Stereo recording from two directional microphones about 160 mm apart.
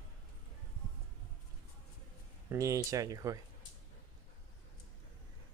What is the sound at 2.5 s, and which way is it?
Speech, 20° right (ahead or behind).